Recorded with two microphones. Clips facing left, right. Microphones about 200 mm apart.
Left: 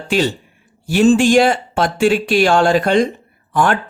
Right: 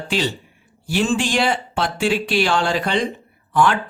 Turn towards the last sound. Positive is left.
turn(degrees=45)  # may be behind; listen again after turning